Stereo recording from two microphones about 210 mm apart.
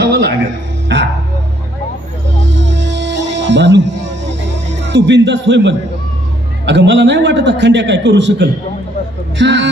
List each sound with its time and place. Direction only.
0.0 s music: 55° right (ahead or behind)
2.3 s music: 60° right (ahead or behind)
4.6 s a man's voice: 60° right (ahead or behind)
9.4 s music: 60° right (ahead or behind)